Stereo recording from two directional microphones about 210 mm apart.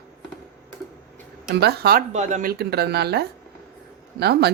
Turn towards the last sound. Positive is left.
turn(degrees=-50)  # may be behind; listen again after turning